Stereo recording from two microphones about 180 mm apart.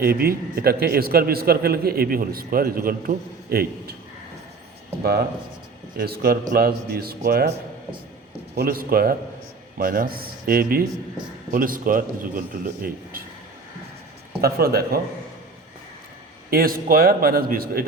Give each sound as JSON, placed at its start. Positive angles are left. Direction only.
{"t": 0.0, "sound": "a man's voice", "side_deg": -55}
{"t": 6.0, "sound": "a man's voice", "side_deg": -55}
{"t": 8.5, "sound": "a man's voice", "side_deg": -55}
{"t": 14.4, "sound": "a man's voice", "side_deg": -60}
{"t": 16.5, "sound": "a man's voice", "side_deg": -55}